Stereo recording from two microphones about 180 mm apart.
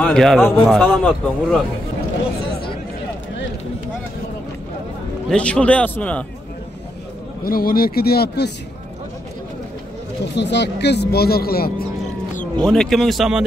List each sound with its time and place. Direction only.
0.0 s speech: 5° left (ahead or behind)
5.3 s a man's voice: 5° left (ahead or behind)
7.4 s speech: 55° left (ahead or behind)
10.3 s speech: 75° left (ahead or behind); by 11.7 s 55° left (ahead or behind)
12.5 s speech: centre (ahead or behind)